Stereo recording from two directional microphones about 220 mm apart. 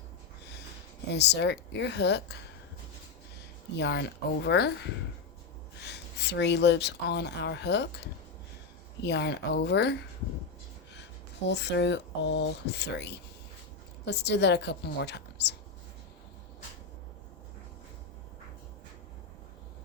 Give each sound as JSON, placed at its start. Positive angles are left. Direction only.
{"t": 1.1, "sound": "speech", "side_deg": 50}
{"t": 3.8, "sound": "speech", "side_deg": 50}
{"t": 5.8, "sound": "speech", "side_deg": 50}
{"t": 11.4, "sound": "speech", "side_deg": 50}